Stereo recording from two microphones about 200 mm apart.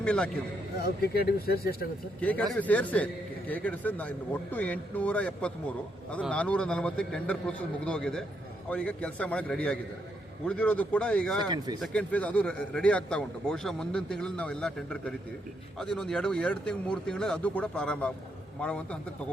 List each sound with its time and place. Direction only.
0.0 s a man's voice: 5° left (ahead or behind)
0.8 s speech: 50° left (ahead or behind)
2.5 s a man's voice: 5° left (ahead or behind)
11.4 s speech: 20° right (ahead or behind)
11.8 s speech: 5° left (ahead or behind)